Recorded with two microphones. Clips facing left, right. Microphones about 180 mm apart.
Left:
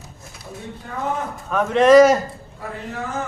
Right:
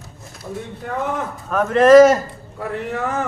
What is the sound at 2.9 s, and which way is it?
Speech, 70° right (ahead or behind).